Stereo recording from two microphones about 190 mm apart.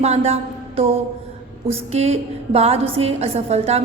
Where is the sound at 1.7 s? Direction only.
35° right (ahead or behind).